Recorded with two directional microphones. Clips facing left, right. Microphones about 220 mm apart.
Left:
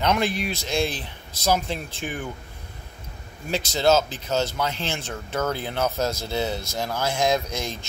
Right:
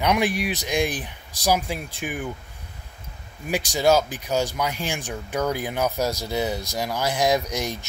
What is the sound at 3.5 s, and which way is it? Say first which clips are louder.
Speech: right 1 dB; 15° right (ahead or behind).